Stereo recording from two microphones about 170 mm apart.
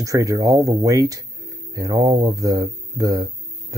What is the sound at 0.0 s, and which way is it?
Speech, 20° right (ahead or behind).